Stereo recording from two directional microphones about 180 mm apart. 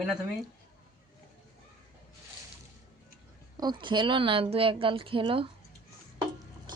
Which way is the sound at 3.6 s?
25° right (ahead or behind).